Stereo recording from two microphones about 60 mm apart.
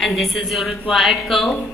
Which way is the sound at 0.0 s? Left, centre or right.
Centre.